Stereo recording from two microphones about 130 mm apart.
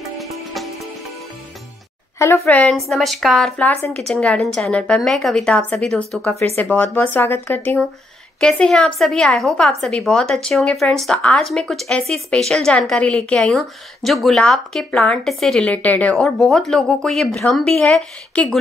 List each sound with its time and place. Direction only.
0.2 s music: centre (ahead or behind)
2.1 s a woman's voice: 20° left (ahead or behind)
2.4 s a woman's voice: 10° left (ahead or behind)
3.6 s speech: 15° left (ahead or behind)
4.1 s a woman's voice: 5° left (ahead or behind)
6.5 s a woman's voice: 15° left (ahead or behind)